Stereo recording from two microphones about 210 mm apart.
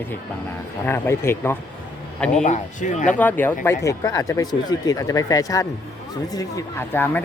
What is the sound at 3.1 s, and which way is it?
Speech, 10° left (ahead or behind).